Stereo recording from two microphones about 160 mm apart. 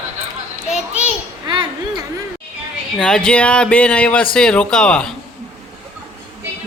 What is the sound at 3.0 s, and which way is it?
A man's voice, 5° left (ahead or behind).